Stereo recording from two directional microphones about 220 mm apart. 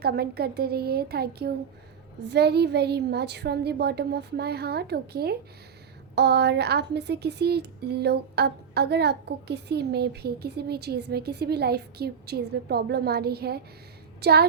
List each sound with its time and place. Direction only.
0.0 s speech: 45° right (ahead or behind)